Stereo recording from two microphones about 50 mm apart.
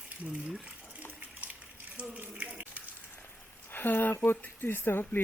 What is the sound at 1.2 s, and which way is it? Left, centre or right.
Bathtub, right.